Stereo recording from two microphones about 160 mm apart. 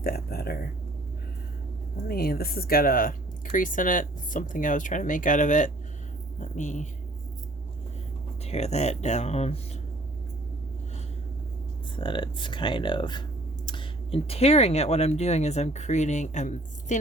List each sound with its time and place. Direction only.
0.0 s speech: 75° left (ahead or behind)
2.0 s speech: 70° left (ahead or behind); by 6.8 s 50° left (ahead or behind)
8.4 s speech: 45° left (ahead or behind)
11.9 s speech: 30° left (ahead or behind); by 17.0 s 50° left (ahead or behind)